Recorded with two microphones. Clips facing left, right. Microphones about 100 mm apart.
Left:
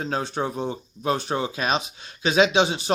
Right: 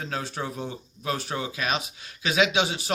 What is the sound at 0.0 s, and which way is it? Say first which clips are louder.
Speech: left 5 dB; 25° left (ahead or behind).